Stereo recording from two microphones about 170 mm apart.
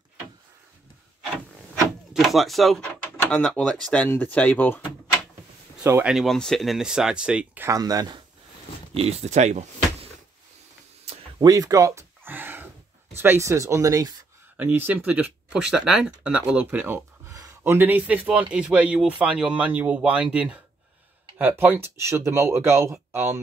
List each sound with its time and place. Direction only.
2.1 s speech: centre (ahead or behind)
5.9 s speech: 10° right (ahead or behind)
6.1 s speech: centre (ahead or behind); by 8.2 s 20° right (ahead or behind)
8.9 s speech: 40° right (ahead or behind)
11.1 s gasp: 25° right (ahead or behind)
13.1 s speech: 15° right (ahead or behind)